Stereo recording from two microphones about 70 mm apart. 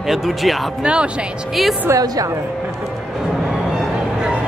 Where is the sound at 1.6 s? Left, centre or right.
Centre.